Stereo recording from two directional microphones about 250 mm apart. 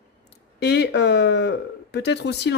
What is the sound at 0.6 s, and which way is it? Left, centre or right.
Speech, left.